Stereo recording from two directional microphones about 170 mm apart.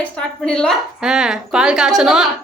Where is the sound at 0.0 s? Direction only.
5° left (ahead or behind).